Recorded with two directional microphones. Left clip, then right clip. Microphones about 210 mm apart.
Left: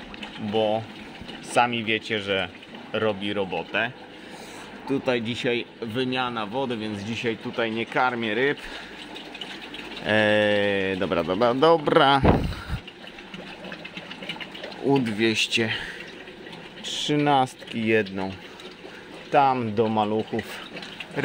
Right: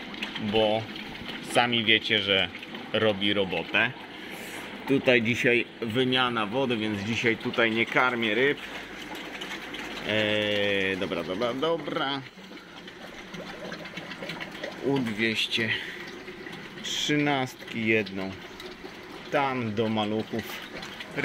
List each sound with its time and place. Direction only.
0.5 s speech: 15° left (ahead or behind)
10.0 s speech: 30° left (ahead or behind); by 12.2 s 50° left (ahead or behind)
15.1 s speech: 45° left (ahead or behind)
19.3 s speech: 25° left (ahead or behind)